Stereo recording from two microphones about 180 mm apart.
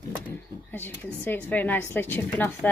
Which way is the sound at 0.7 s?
10° left (ahead or behind).